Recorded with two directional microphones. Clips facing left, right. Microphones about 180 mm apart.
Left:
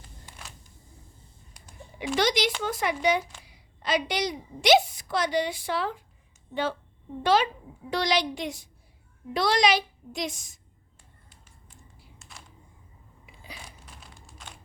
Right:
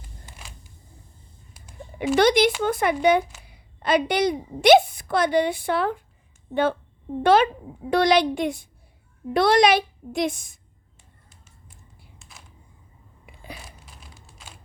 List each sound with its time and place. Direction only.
0.3 s a sound: 10° right (ahead or behind)
2.1 s a child's voice: 55° right (ahead or behind)
13.2 s biting: 55° right (ahead or behind)